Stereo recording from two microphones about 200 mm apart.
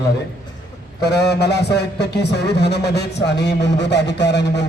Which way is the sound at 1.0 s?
55° left (ahead or behind).